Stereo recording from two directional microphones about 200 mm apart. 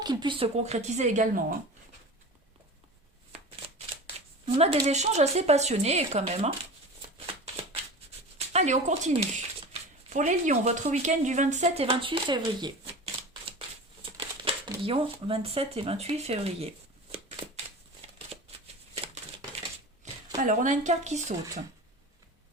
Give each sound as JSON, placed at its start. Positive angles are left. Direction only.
{"t": 0.0, "sound": "speech", "side_deg": -20}
{"t": 3.3, "sound": "shuffling cards", "side_deg": -30}
{"t": 4.4, "sound": "speech", "side_deg": -30}
{"t": 8.5, "sound": "speech", "side_deg": -35}
{"t": 14.0, "sound": "speech", "side_deg": -25}
{"t": 18.0, "sound": "a sound", "side_deg": -30}
{"t": 20.3, "sound": "speech", "side_deg": -40}